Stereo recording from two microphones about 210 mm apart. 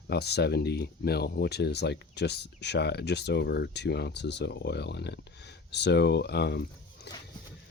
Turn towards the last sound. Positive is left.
turn(degrees=50)  # may be behind; listen again after turning